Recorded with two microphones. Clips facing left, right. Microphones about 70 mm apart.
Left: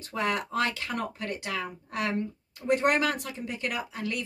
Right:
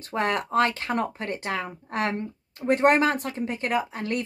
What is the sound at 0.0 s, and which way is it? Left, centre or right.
Speech, right.